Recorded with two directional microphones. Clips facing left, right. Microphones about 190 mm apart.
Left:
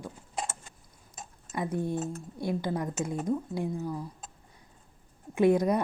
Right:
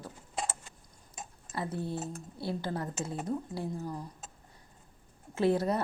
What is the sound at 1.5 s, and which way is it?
Speech, 15° left (ahead or behind).